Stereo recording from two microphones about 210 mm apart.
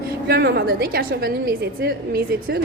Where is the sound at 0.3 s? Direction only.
50° right (ahead or behind).